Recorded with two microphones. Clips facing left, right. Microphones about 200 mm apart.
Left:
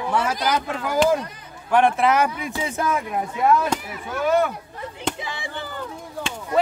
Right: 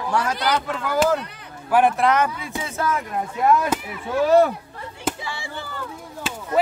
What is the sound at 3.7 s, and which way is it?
Speech, 5° right (ahead or behind).